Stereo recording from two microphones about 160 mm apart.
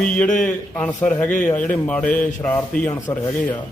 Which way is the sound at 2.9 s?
25° left (ahead or behind).